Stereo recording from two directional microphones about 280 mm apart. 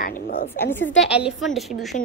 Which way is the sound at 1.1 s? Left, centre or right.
Centre.